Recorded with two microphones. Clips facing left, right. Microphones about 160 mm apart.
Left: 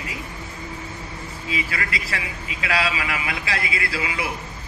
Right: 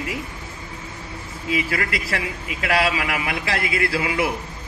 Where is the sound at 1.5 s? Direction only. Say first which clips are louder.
Right 5 dB; 50° right (ahead or behind).